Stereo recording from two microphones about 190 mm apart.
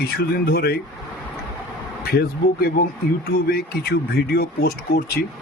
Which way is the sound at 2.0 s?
55° left (ahead or behind).